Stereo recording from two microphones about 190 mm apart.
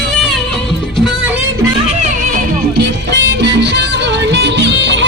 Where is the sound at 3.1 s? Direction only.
65° right (ahead or behind).